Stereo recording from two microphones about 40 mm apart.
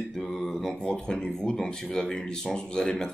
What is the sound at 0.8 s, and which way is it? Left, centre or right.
Speech, centre.